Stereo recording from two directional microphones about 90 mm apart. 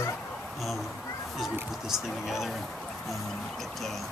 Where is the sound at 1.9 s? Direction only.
5° right (ahead or behind).